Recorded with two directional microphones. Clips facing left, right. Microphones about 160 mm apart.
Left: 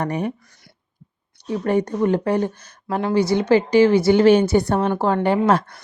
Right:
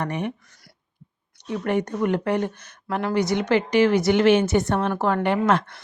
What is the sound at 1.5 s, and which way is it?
Speech, 35° left (ahead or behind).